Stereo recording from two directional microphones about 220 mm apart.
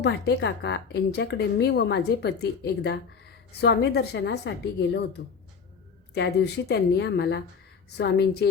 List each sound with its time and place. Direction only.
0.0 s a woman's voice: 50° left (ahead or behind)
6.1 s a woman's voice: 50° left (ahead or behind)